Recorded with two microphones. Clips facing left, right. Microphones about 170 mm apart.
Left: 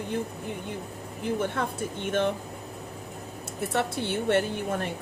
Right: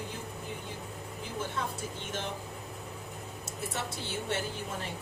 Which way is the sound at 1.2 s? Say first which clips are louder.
Left 8 dB; 60° left (ahead or behind).